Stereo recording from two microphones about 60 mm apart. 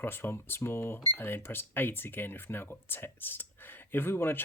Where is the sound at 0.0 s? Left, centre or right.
Left.